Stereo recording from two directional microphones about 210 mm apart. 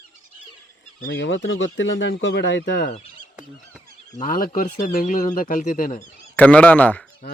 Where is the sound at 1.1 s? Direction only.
60° left (ahead or behind).